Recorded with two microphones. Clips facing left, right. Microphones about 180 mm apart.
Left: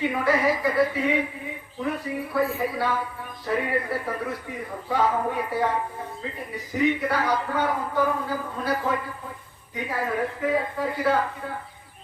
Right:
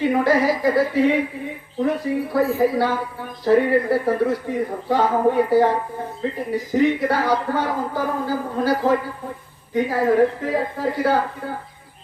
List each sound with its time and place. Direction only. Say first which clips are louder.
0.0 s speech: right 5 dB; 30° right (ahead or behind)
6.7 s speech: right 4 dB; 30° right (ahead or behind)